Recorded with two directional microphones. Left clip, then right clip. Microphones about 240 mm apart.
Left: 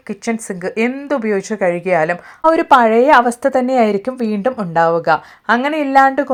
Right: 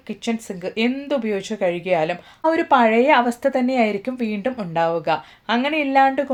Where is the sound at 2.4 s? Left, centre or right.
Left.